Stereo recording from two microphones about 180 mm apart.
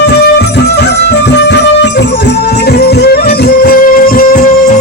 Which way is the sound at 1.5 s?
75° left (ahead or behind).